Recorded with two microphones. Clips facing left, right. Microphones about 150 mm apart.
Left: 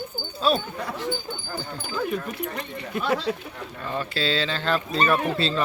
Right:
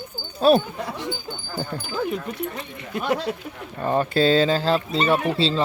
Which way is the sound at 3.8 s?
45° right (ahead or behind).